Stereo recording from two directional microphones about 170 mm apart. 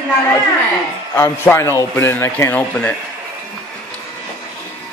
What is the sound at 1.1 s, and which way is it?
A man's voice, 15° left (ahead or behind).